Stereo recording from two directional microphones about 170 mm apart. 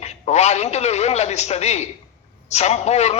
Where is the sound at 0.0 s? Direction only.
40° left (ahead or behind).